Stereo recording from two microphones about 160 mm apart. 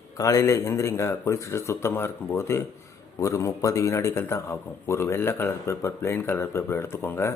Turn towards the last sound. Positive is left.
turn(degrees=15)  # may be behind; listen again after turning